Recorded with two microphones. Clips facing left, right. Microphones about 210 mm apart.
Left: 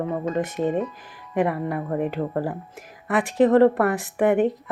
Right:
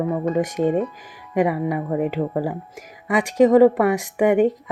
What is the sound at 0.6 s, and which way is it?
Speech, 50° right (ahead or behind).